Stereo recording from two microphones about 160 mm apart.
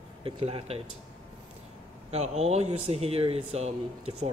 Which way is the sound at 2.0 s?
40° right (ahead or behind).